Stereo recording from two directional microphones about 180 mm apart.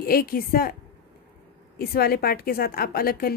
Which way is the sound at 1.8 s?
60° left (ahead or behind).